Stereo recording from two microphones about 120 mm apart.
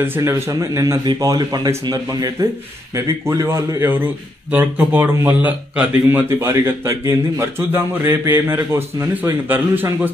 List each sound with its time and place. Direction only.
0.0 s a man's voice: 20° right (ahead or behind)